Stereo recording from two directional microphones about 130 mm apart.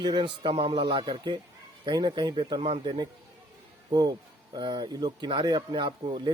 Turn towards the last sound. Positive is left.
turn(degrees=-35)  # may be behind; listen again after turning